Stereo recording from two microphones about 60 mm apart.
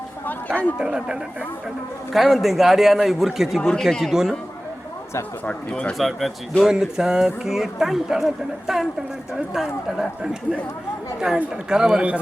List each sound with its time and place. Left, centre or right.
0.3 s speech: left
0.8 s speech: centre
2.1 s a man's voice: centre
5.5 s speech: centre
5.9 s a man's voice: centre
6.6 s a man's voice: centre
11.7 s speech: centre